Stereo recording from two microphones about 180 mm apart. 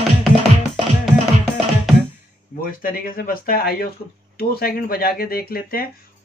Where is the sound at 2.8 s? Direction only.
50° left (ahead or behind).